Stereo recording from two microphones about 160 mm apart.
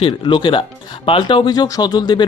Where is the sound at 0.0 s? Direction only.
30° left (ahead or behind).